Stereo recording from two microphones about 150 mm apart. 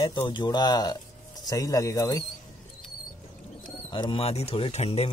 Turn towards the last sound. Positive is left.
turn(degrees=45)  # may be behind; listen again after turning